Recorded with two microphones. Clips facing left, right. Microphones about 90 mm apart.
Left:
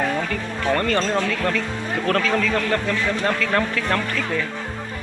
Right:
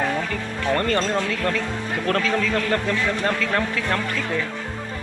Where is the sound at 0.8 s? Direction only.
35° right (ahead or behind).